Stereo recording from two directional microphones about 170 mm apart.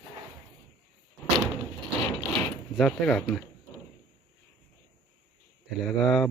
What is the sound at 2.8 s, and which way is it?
Speech, 5° left (ahead or behind).